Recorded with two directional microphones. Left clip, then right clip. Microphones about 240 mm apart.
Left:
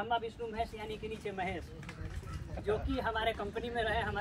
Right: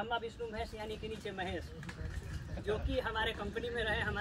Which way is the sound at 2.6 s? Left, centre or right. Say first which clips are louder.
Left 2 dB; centre.